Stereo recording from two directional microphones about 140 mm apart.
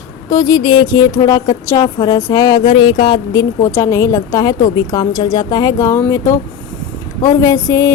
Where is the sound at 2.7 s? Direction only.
40° left (ahead or behind).